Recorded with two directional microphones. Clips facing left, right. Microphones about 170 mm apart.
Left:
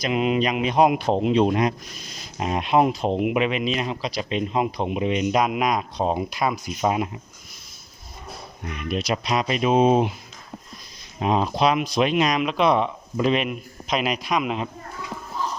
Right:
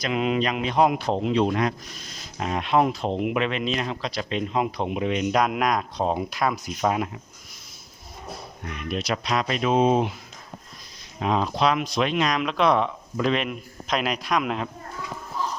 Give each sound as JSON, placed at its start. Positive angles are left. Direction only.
{"t": 0.0, "sound": "speech", "side_deg": 10}
{"t": 8.9, "sound": "speech", "side_deg": 10}
{"t": 11.2, "sound": "a man's voice", "side_deg": 15}